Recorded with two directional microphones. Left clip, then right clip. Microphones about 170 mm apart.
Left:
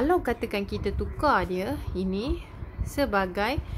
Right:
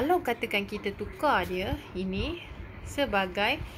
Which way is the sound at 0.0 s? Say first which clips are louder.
Left 2 dB; 40° left (ahead or behind).